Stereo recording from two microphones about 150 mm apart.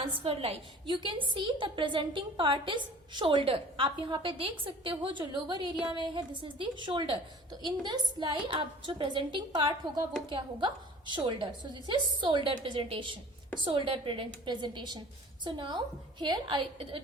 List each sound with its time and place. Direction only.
0.2 s a woman's voice: 40° right (ahead or behind)